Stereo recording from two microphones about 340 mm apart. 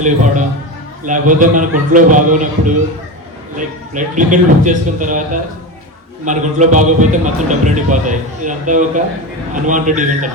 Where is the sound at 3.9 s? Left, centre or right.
Right.